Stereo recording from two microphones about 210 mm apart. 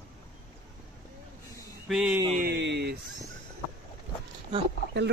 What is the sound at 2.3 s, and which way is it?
Speech, 50° right (ahead or behind).